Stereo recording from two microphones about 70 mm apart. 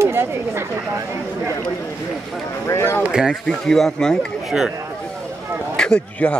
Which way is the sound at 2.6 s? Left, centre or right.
Left.